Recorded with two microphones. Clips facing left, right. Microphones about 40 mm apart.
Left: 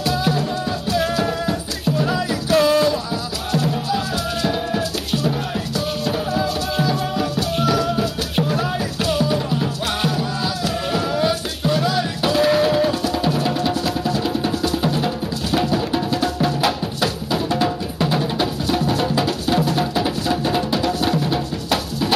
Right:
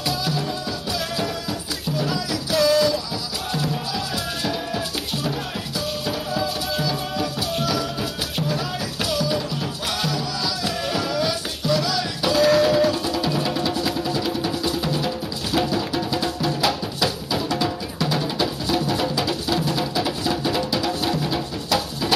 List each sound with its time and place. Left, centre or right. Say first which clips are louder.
0.1 s music: left 4 dB; left
6.0 s music: left 4 dB; left
8.4 s music: left 6 dB; left
12.3 s music: even; left
14.8 s music: left 4 dB; left
15.0 s music: left 4 dB; centre; by 18.5 s left
19.8 s music: left 3 dB; left